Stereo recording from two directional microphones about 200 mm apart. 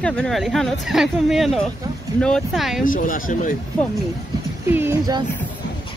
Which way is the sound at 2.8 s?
40° left (ahead or behind).